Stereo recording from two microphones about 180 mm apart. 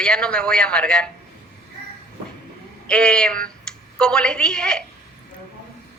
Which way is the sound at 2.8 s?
5° left (ahead or behind).